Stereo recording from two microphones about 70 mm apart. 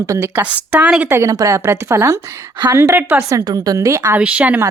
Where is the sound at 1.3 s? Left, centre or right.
Right.